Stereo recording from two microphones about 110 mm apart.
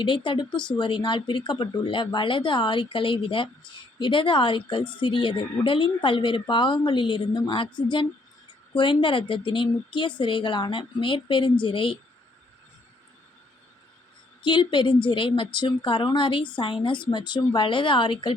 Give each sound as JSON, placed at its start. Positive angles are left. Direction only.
{"t": 0.0, "sound": "speech", "side_deg": 50}
{"t": 14.4, "sound": "speech", "side_deg": 50}